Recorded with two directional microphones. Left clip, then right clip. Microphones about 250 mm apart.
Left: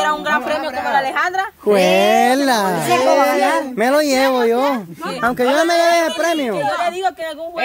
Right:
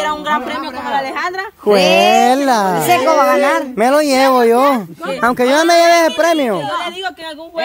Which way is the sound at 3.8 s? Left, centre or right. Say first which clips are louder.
Right 4 dB; centre.